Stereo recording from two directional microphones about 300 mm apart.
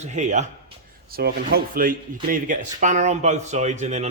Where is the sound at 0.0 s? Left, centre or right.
Right.